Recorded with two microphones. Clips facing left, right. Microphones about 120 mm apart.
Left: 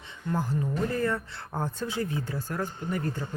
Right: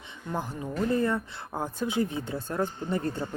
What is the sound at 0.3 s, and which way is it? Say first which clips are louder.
Speech: left 3 dB; 20° right (ahead or behind).